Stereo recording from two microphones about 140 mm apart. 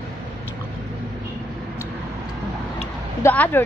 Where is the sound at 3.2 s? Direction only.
15° left (ahead or behind).